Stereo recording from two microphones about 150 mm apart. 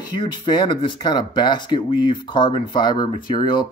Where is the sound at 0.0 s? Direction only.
30° left (ahead or behind).